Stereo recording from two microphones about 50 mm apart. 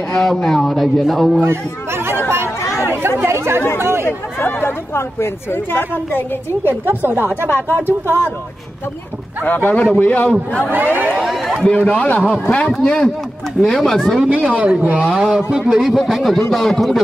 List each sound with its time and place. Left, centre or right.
0.1 s speech: centre
2.9 s speech: right
4.5 s a woman's voice: left
6.9 s speech: right
7.4 s a woman's voice: left
9.7 s a man's voice: left
10.7 s speech: right
11.6 s a man's voice: left; by 14.2 s centre
14.2 s a woman's voice: right
15.1 s speech: centre
16.0 s speech: centre